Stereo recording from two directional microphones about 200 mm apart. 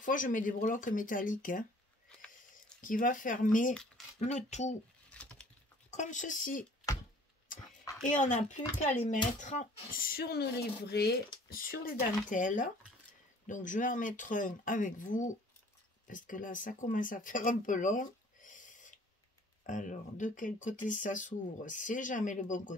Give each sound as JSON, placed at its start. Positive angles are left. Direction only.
{"t": 0.0, "sound": "speech", "side_deg": 40}
{"t": 2.0, "sound": "a sound", "side_deg": 5}
{"t": 2.8, "sound": "speech", "side_deg": 40}
{"t": 5.1, "sound": "patter", "side_deg": 5}
{"t": 5.9, "sound": "speech", "side_deg": 40}
{"t": 8.1, "sound": "speech", "side_deg": 40}